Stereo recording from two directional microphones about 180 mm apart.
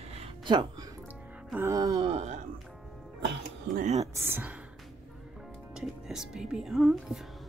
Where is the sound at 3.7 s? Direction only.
40° right (ahead or behind).